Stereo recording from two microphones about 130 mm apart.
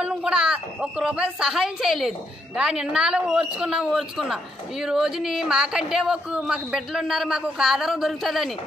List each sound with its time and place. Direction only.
0.0 s a woman's voice: 10° right (ahead or behind)